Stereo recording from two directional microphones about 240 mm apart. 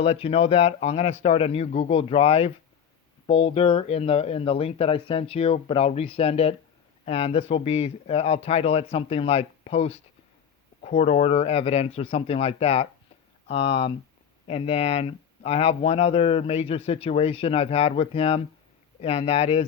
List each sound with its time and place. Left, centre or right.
0.0 s speech: left